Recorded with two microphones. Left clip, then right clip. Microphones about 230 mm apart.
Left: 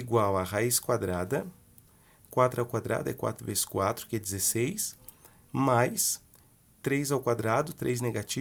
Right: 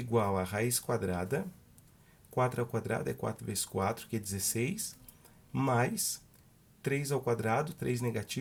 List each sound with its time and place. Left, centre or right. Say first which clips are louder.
0.1 s speech: left 5 dB; left